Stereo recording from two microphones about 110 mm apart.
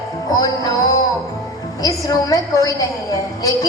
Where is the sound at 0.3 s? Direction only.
35° left (ahead or behind).